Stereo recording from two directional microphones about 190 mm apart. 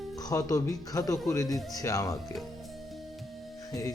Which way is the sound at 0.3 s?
15° left (ahead or behind).